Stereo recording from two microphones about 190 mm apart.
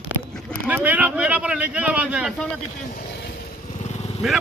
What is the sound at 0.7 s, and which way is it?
Speech, 10° right (ahead or behind).